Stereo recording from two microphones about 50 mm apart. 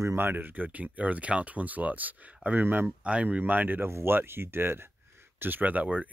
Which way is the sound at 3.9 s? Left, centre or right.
Right.